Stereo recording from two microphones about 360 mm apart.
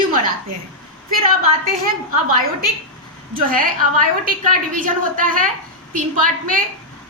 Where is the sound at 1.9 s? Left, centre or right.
Right.